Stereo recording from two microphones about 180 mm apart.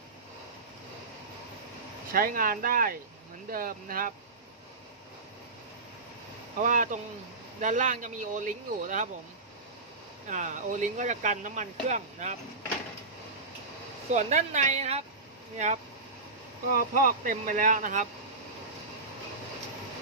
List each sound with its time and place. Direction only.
2.1 s speech: 50° right (ahead or behind)
6.6 s speech: 45° right (ahead or behind)
10.2 s speech: 45° right (ahead or behind)
14.1 s a woman's voice: 40° right (ahead or behind)